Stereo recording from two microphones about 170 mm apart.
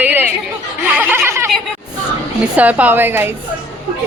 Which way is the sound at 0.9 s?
10° right (ahead or behind).